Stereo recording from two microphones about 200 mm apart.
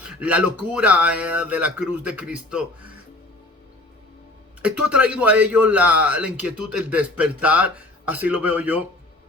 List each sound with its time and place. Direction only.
0.2 s speech: 5° right (ahead or behind)
4.6 s speech: 5° right (ahead or behind)